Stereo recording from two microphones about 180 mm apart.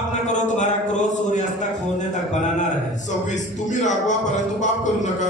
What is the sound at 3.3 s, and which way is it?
Speech, 45° left (ahead or behind).